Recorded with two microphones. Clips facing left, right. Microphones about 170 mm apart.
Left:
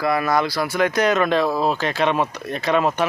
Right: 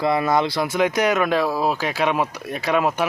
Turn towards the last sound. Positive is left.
turn(degrees=-10)  # may be behind; listen again after turning